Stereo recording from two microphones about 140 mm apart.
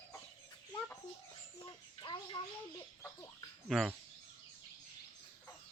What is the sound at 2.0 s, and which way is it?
Bird, 35° left (ahead or behind).